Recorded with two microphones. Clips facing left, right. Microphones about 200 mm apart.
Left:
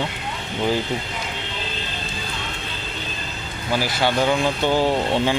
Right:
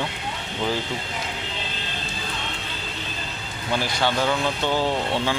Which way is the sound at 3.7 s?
5° left (ahead or behind).